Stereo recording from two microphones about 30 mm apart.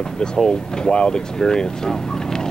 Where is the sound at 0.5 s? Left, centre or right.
Left.